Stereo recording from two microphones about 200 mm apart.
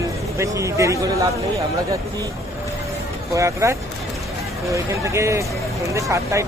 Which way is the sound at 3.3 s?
15° right (ahead or behind).